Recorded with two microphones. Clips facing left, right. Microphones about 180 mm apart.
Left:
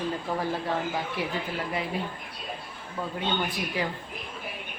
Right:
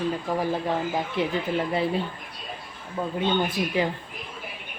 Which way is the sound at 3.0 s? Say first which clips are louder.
Right 4 dB; 15° right (ahead or behind).